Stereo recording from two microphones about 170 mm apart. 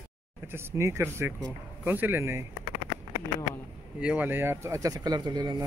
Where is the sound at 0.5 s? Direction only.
15° right (ahead or behind).